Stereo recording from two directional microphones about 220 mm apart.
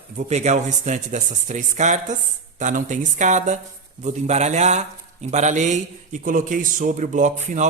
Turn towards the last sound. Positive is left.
turn(degrees=-35)  # may be behind; listen again after turning